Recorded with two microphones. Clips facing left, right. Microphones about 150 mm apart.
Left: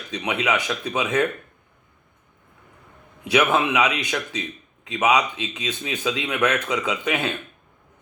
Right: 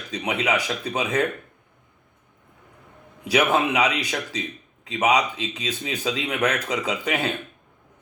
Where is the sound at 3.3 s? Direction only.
35° right (ahead or behind).